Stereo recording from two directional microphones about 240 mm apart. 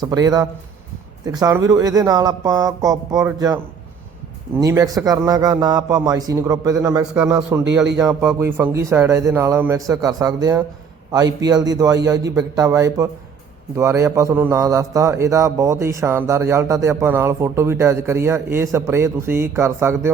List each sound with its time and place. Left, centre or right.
0.0 s a man's voice: centre
4.6 s a man's voice: centre